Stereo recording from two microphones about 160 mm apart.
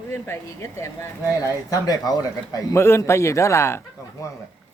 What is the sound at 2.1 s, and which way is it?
Speech, 20° left (ahead or behind).